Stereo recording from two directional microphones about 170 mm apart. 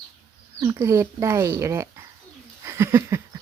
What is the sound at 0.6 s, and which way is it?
Speech, 20° right (ahead or behind).